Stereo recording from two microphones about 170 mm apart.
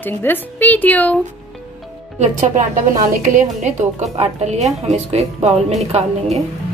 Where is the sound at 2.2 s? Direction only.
45° right (ahead or behind).